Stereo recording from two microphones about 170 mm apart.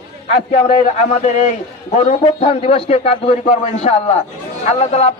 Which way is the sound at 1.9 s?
35° left (ahead or behind).